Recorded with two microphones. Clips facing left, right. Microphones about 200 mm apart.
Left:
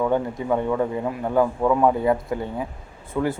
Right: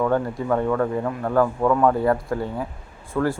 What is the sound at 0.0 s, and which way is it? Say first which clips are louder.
Speech: right 1 dB; 15° left (ahead or behind).